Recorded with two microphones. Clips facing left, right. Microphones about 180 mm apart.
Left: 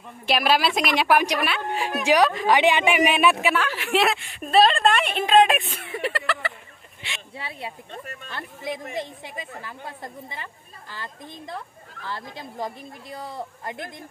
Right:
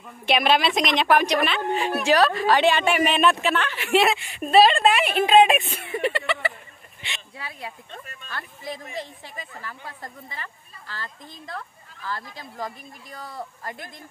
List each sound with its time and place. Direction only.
0.3 s a woman's voice: 5° left (ahead or behind)
7.3 s speech: 25° left (ahead or behind)